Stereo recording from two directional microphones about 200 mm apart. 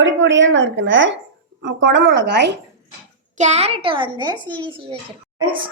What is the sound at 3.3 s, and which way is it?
A woman's voice, 35° right (ahead or behind).